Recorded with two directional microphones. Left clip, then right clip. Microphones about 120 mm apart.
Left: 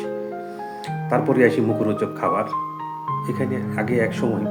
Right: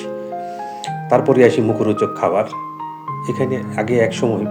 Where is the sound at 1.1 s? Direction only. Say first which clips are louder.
Right 6 dB; 30° right (ahead or behind).